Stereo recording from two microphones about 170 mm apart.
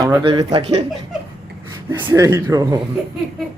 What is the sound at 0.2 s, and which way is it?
Speech, 25° right (ahead or behind).